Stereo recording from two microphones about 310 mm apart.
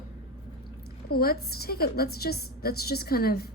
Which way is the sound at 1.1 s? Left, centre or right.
Left.